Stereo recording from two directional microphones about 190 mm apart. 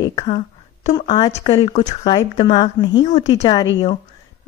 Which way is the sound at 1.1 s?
25° left (ahead or behind).